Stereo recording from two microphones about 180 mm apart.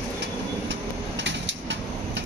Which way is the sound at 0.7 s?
85° right.